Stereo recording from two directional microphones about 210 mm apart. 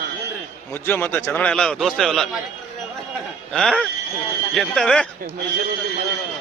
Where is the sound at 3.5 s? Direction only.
5° left (ahead or behind).